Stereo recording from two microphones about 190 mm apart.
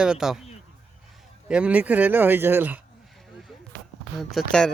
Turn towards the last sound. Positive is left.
turn(degrees=5)  # may be behind; listen again after turning